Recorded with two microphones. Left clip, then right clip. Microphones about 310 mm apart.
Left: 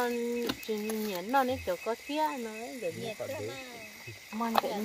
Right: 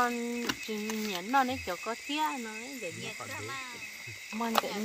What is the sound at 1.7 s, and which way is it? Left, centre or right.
Speech, right.